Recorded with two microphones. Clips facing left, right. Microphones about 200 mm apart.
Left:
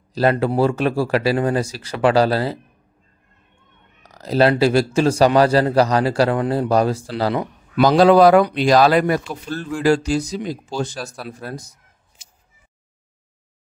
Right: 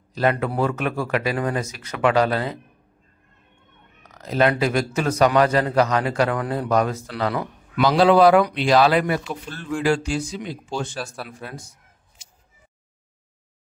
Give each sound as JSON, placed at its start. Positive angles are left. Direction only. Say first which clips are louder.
{"t": 0.1, "sound": "a man's voice", "louder": "left 4 dB", "side_deg": 35}
{"t": 4.0, "sound": "a man's voice", "louder": "left 4 dB", "side_deg": 35}
{"t": 7.8, "sound": "a man's voice", "louder": "left 3 dB", "side_deg": 40}